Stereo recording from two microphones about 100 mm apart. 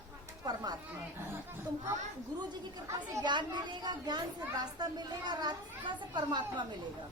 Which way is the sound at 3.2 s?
50° right (ahead or behind).